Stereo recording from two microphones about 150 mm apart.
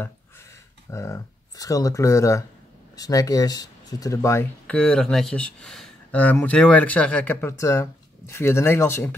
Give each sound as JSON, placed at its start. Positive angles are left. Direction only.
{"t": 0.8, "sound": "speech", "side_deg": 20}